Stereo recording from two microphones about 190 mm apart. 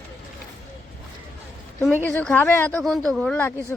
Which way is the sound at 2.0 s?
5° left (ahead or behind).